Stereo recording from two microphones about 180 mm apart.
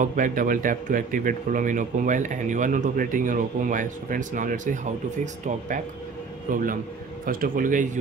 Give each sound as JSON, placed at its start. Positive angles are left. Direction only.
{"t": 0.0, "sound": "speech", "side_deg": -50}
{"t": 6.5, "sound": "speech", "side_deg": -50}